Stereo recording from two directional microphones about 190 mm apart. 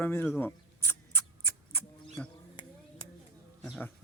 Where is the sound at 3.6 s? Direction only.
5° left (ahead or behind).